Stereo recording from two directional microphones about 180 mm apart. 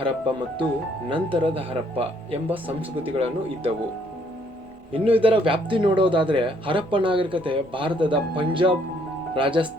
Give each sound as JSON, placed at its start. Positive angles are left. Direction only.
{"t": 0.0, "sound": "a man's voice", "side_deg": -30}
{"t": 4.9, "sound": "a man's voice", "side_deg": -30}